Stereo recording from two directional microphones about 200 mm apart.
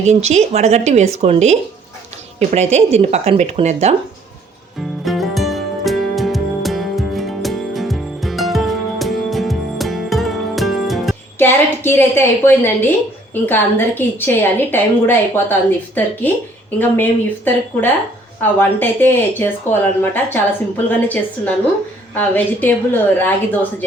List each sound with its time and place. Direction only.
0.0 s speech: 35° right (ahead or behind)
5.0 s music: centre (ahead or behind)
11.3 s speech: 10° left (ahead or behind)
16.7 s speech: 10° left (ahead or behind)